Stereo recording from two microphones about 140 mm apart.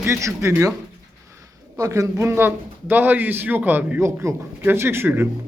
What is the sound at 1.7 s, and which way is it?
A man's voice, 25° right (ahead or behind).